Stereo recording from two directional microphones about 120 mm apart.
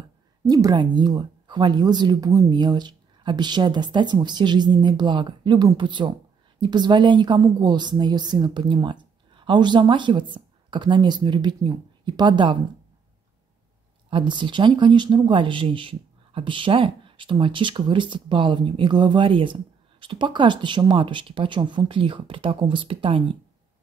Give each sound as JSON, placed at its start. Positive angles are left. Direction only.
{"t": 0.5, "sound": "speech", "side_deg": -30}
{"t": 14.1, "sound": "speech", "side_deg": -40}